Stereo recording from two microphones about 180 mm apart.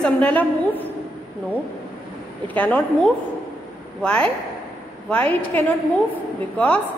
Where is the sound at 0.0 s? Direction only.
5° left (ahead or behind).